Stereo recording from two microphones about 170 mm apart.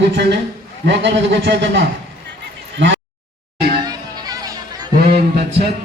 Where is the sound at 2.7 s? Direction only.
90° right.